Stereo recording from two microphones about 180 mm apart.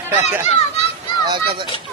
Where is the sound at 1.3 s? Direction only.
25° right (ahead or behind).